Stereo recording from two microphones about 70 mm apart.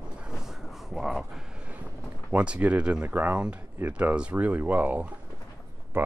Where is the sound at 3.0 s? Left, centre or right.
Right.